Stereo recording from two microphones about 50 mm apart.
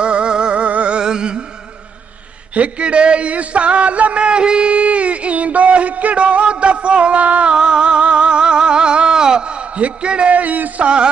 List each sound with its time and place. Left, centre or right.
0.0 s music: right
2.5 s a sound: right
7.5 s music: centre; by 10.9 s right